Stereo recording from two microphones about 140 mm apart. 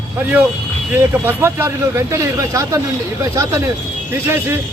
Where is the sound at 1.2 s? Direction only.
15° right (ahead or behind).